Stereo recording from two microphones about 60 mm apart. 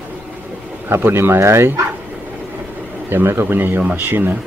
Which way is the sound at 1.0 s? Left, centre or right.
Right.